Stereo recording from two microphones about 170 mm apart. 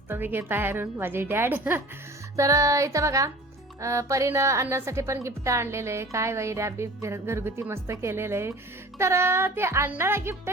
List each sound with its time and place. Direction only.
0.1 s a woman's voice: 10° right (ahead or behind)